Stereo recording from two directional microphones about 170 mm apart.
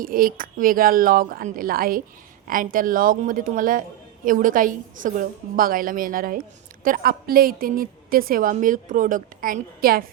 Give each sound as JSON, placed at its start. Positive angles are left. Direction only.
{"t": 0.0, "sound": "a woman's voice", "side_deg": -55}